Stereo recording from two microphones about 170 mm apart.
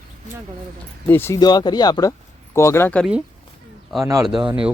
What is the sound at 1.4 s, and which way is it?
Speech, 25° left (ahead or behind).